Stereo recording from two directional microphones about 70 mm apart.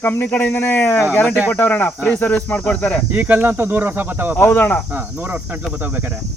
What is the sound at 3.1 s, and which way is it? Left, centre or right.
Speech, right.